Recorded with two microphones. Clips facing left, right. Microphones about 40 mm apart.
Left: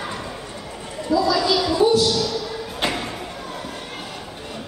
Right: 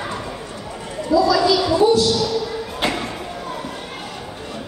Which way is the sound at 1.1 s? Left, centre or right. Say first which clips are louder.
Right 4 dB; right.